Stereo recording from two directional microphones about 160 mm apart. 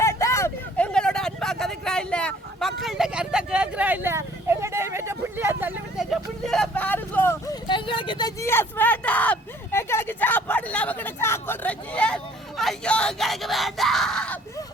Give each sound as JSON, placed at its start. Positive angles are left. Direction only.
{"t": 0.0, "sound": "vehicle", "side_deg": 20}
{"t": 0.9, "sound": "speech", "side_deg": 5}
{"t": 8.4, "sound": "speech", "side_deg": 15}